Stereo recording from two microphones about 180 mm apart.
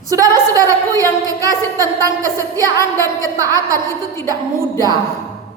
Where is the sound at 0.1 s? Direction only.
20° right (ahead or behind).